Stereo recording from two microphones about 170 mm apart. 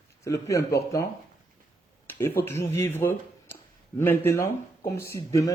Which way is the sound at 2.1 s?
15° left (ahead or behind).